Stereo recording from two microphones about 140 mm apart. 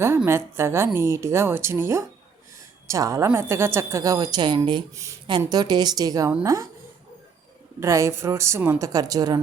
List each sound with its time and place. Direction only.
0.3 s a woman's voice: 20° right (ahead or behind)
7.8 s a woman's voice: 20° right (ahead or behind)